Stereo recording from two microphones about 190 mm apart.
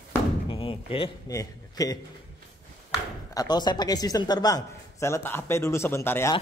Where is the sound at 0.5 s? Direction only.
25° left (ahead or behind).